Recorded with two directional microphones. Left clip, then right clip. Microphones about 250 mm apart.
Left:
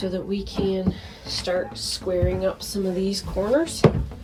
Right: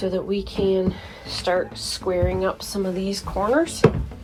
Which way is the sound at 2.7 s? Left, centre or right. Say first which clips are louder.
Even; centre.